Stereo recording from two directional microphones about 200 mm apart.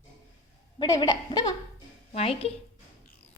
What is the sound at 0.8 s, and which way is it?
Speech, 15° left (ahead or behind).